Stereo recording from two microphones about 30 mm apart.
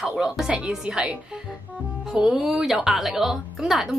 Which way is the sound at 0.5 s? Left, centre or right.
Right.